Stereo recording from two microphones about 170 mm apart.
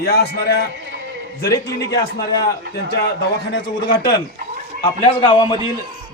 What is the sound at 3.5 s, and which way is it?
Speech, 90° left.